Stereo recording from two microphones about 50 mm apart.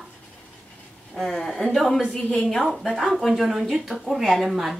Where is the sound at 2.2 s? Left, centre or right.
Left.